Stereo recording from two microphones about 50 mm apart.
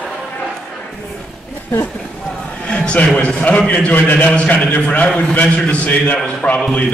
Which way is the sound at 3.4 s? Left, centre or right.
Left.